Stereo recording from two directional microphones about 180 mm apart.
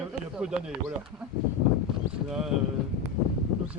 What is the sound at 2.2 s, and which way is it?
Speech, 5° right (ahead or behind).